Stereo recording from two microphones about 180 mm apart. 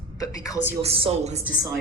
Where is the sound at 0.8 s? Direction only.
35° right (ahead or behind).